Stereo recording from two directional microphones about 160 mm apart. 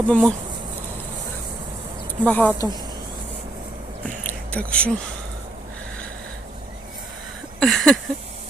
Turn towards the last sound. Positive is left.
turn(degrees=0)  # may be behind; listen again after turning